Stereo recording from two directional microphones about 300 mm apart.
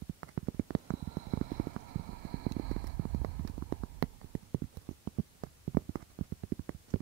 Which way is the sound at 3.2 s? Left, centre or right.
Right.